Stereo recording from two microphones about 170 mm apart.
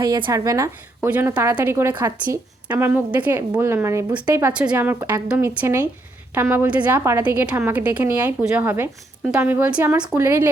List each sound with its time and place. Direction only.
0.0 s a woman's voice: 25° right (ahead or behind)